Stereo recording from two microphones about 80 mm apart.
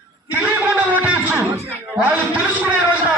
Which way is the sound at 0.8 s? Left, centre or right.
Centre.